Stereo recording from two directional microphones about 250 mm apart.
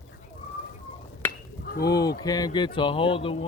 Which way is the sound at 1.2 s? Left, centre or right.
Centre.